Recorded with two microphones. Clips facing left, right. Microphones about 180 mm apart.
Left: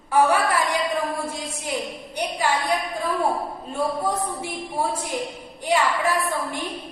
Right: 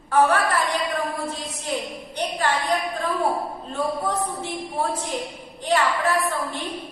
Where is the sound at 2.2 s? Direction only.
10° left (ahead or behind).